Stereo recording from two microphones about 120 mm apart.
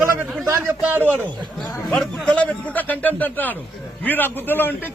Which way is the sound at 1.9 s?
10° left (ahead or behind).